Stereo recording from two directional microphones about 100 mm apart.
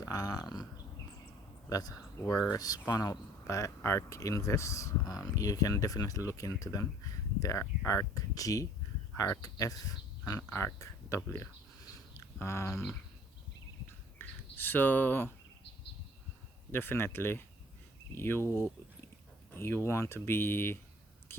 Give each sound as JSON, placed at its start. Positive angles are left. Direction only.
{"t": 0.0, "sound": "a sound", "side_deg": 35}
{"t": 1.7, "sound": "speech", "side_deg": 35}
{"t": 14.2, "sound": "speech", "side_deg": 20}
{"t": 16.7, "sound": "speech", "side_deg": 20}